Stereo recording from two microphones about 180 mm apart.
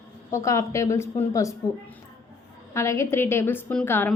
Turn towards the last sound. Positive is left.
turn(degrees=10)  # may be behind; listen again after turning